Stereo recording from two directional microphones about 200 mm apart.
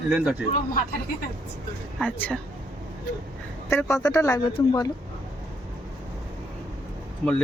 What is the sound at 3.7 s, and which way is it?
Speech, 10° left (ahead or behind).